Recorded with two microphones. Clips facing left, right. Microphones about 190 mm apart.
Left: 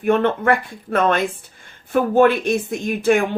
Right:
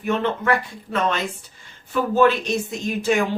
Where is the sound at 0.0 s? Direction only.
55° left (ahead or behind).